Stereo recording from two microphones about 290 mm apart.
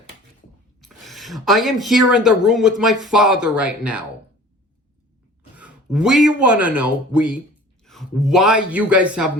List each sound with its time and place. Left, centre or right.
0.8 s speech: centre
5.5 s a man's voice: centre